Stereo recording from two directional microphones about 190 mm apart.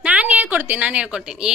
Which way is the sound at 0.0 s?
10° right (ahead or behind).